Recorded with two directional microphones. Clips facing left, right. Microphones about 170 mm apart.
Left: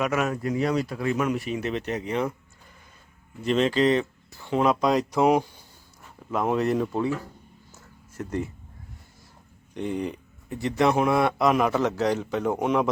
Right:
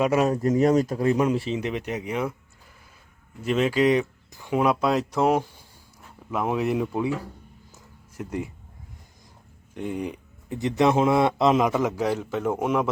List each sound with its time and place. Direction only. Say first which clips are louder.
0.0 s speech: right 4 dB; 30° right (ahead or behind); by 2.3 s 10° right (ahead or behind)
3.4 s speech: even; 5° right (ahead or behind)
7.7 s a sound: even; 15° right (ahead or behind)
9.7 s speech: left 1 dB; 5° right (ahead or behind); by 11.7 s 20° right (ahead or behind)
11.7 s a man's voice: even; 10° right (ahead or behind)